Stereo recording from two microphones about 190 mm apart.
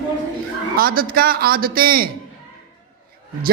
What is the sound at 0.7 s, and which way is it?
A man's voice, 50° right (ahead or behind).